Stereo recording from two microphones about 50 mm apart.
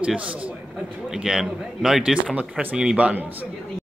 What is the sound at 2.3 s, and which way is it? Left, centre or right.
Speech, right.